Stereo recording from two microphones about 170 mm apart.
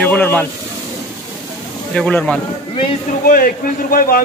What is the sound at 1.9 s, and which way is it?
Speech, 5° left (ahead or behind).